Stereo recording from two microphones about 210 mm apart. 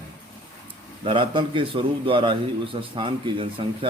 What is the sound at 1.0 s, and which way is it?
A man's voice, 25° right (ahead or behind).